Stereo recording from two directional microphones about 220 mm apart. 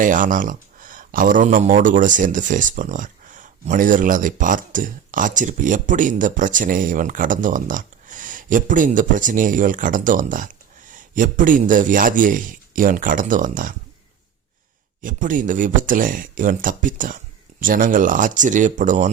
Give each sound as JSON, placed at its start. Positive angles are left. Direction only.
{"t": 0.0, "sound": "speech", "side_deg": -35}
{"t": 15.0, "sound": "speech", "side_deg": -35}